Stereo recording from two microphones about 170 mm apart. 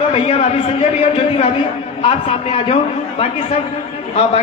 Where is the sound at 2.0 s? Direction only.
35° left (ahead or behind).